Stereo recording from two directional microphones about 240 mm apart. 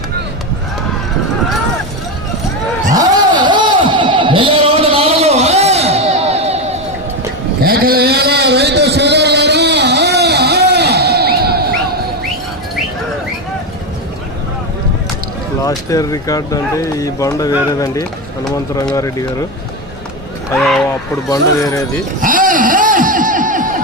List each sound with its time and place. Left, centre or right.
2.9 s a sound: centre
7.6 s a sound: right
15.6 s speech: centre
20.6 s speech: centre
21.2 s speech: centre
22.2 s snicker: right